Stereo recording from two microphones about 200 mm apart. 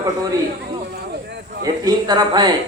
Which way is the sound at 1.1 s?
55° right (ahead or behind).